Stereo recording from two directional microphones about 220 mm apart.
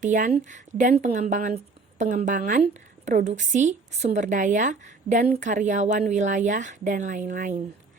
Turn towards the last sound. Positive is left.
turn(degrees=-35)  # may be behind; listen again after turning